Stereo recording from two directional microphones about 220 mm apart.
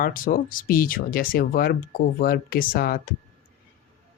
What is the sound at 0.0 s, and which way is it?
Speech, 40° left (ahead or behind).